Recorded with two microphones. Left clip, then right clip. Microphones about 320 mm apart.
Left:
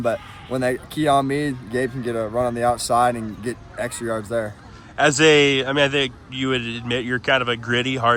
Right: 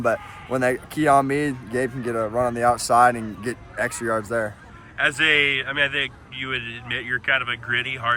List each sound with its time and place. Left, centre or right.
0.0 s a man's voice: centre